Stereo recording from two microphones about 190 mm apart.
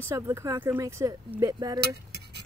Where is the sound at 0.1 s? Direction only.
15° right (ahead or behind).